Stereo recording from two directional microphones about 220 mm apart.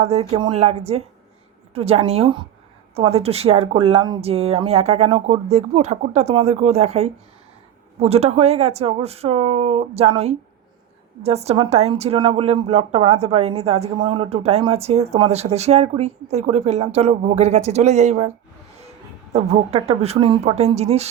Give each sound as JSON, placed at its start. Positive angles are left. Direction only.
{"t": 0.0, "sound": "speech", "side_deg": -30}
{"t": 11.2, "sound": "speech", "side_deg": -30}